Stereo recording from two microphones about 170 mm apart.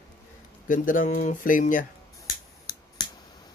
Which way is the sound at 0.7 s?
50° left (ahead or behind).